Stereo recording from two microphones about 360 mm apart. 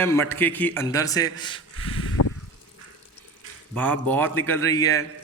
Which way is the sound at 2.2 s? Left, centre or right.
Left.